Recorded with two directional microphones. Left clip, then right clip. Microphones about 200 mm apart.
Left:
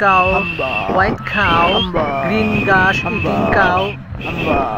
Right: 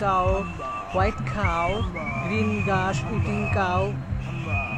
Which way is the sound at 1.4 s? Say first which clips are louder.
Left 12 dB; 35° left (ahead or behind).